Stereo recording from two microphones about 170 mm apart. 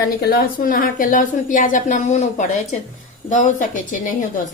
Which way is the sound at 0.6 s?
55° left (ahead or behind).